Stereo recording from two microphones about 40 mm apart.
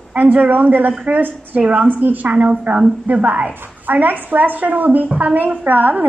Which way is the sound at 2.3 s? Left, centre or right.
Right.